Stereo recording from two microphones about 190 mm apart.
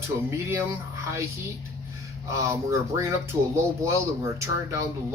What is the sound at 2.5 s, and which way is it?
Speech, 15° right (ahead or behind).